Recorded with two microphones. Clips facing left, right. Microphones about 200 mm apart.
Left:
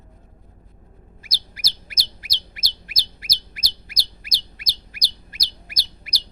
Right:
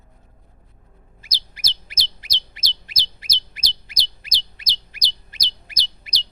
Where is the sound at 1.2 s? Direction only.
20° right (ahead or behind).